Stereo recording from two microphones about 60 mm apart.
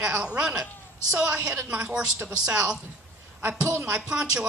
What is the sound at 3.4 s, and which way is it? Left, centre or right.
Speech, right.